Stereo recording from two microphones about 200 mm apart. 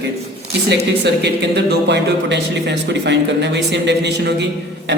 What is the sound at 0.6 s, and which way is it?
Speech, 55° right (ahead or behind).